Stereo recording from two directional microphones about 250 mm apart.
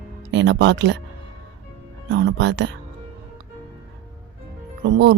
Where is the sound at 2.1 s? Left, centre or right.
Right.